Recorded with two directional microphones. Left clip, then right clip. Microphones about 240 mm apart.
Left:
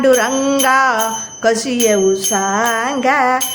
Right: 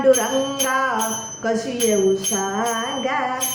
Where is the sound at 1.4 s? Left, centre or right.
Left.